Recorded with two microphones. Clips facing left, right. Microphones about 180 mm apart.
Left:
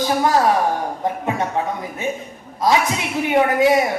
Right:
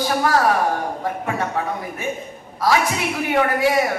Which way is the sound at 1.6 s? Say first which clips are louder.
Left 2 dB; 20° left (ahead or behind).